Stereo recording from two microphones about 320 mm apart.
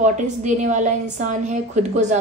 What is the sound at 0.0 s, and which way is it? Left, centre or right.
A woman's voice, right.